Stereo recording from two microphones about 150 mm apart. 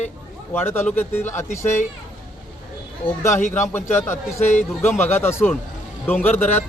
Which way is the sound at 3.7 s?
15° left (ahead or behind).